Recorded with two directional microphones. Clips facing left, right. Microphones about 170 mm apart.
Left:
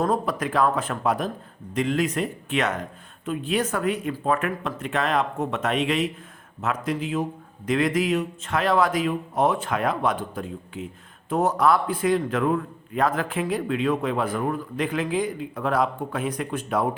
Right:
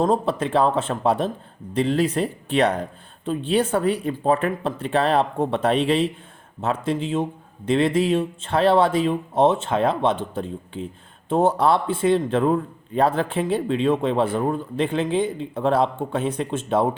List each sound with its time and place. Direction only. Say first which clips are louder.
0.0 s a man's voice: right 3 dB; 25° right (ahead or behind)